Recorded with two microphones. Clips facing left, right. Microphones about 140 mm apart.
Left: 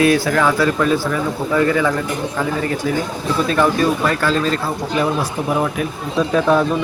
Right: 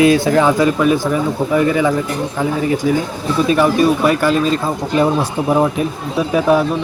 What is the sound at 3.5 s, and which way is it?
Speech, 15° right (ahead or behind).